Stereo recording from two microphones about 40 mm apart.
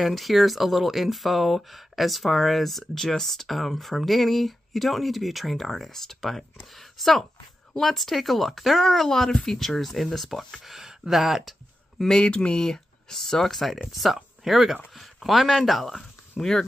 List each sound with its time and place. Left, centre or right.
0.0 s speech: centre
10.6 s speech: centre
12.1 s speech: left; by 13.7 s centre
14.1 s speech: centre